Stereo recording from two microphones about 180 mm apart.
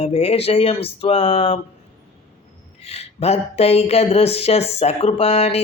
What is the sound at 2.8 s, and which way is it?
Speech, 35° left (ahead or behind).